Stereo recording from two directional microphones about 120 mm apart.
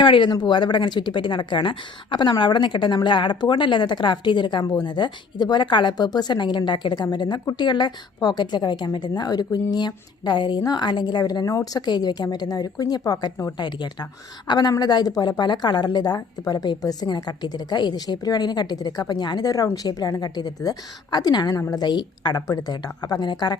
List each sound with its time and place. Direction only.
0.0 s a woman's voice: 40° left (ahead or behind)